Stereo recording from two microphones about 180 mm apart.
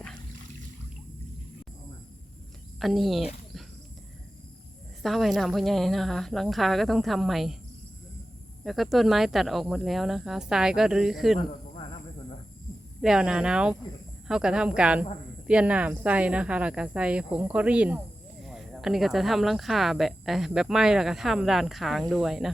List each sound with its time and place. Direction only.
2.8 s speech: centre (ahead or behind)
5.0 s speech: centre (ahead or behind)
8.6 s speech: centre (ahead or behind)
11.3 s a sound: 30° left (ahead or behind)
13.0 s speech: 5° right (ahead or behind)